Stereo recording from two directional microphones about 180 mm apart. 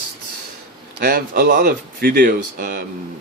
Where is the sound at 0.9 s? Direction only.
55° right (ahead or behind).